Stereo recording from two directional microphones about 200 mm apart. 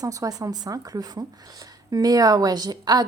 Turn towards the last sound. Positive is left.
turn(degrees=-20)  # may be behind; listen again after turning